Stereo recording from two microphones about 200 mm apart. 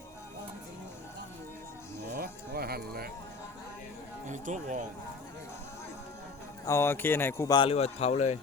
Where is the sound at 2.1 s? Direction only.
50° right (ahead or behind).